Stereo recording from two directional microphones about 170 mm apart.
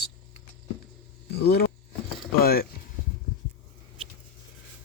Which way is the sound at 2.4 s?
65° left (ahead or behind).